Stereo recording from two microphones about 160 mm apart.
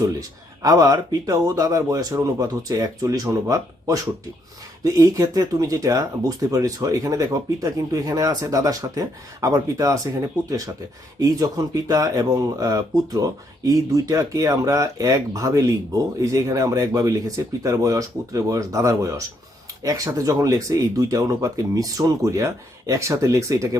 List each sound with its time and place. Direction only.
0.0 s speech: 20° right (ahead or behind)
11.2 s speech: 20° right (ahead or behind)